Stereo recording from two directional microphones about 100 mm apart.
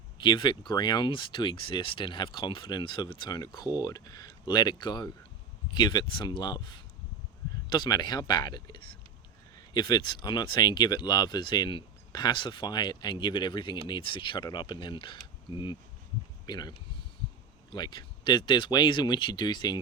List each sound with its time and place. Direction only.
0.2 s speech: 50° left (ahead or behind)
16.5 s speech: 45° left (ahead or behind)